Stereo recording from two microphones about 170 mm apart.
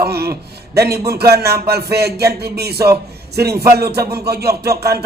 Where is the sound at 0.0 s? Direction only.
70° right (ahead or behind).